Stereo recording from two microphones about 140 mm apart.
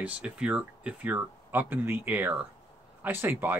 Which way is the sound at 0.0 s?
10° right (ahead or behind).